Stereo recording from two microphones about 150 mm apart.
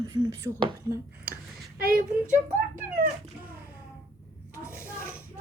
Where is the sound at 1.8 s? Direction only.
75° right (ahead or behind).